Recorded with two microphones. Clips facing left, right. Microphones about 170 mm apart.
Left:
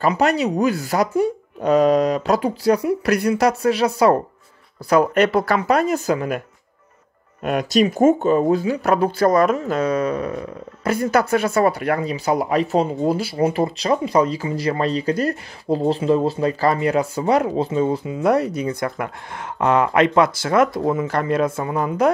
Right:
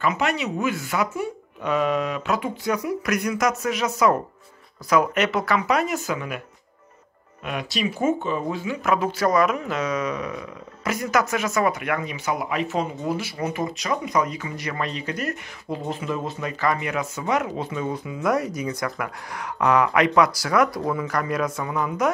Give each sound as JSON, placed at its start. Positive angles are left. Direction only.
{"t": 0.0, "sound": "speech", "side_deg": 35}
{"t": 7.4, "sound": "speech", "side_deg": 45}